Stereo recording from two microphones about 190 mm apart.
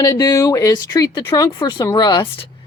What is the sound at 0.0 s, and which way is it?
Speech, 20° left (ahead or behind).